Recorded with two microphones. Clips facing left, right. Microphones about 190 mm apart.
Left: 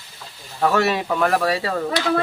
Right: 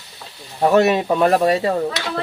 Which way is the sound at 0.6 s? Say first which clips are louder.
Right 5 dB; 20° right (ahead or behind).